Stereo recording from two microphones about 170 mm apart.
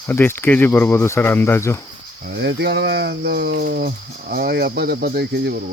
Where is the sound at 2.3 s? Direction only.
75° right (ahead or behind).